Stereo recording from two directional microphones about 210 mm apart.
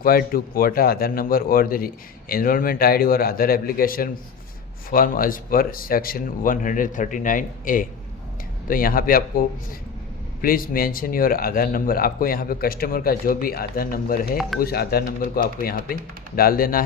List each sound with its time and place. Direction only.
0.0 s speech: 45° left (ahead or behind)
10.4 s speech: 45° left (ahead or behind)